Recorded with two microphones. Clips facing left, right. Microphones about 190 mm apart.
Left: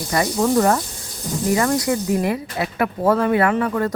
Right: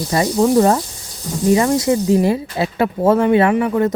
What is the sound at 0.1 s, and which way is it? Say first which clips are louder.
Speech: right 4 dB; 25° right (ahead or behind).